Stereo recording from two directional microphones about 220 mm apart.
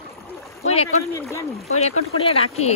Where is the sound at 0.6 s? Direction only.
30° left (ahead or behind).